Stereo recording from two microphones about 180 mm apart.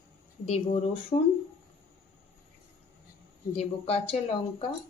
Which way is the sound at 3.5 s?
35° left (ahead or behind).